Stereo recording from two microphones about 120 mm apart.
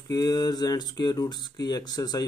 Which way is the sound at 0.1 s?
30° left (ahead or behind).